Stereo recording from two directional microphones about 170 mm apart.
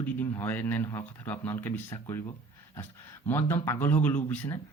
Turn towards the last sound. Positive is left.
turn(degrees=10)  # may be behind; listen again after turning